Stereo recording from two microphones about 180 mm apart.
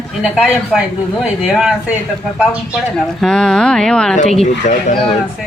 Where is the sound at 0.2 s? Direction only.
5° right (ahead or behind).